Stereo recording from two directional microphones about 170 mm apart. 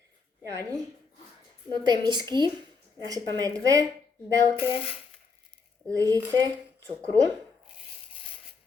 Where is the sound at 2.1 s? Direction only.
25° right (ahead or behind).